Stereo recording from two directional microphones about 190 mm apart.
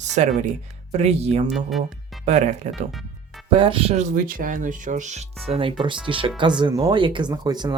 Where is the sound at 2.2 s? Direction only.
40° right (ahead or behind).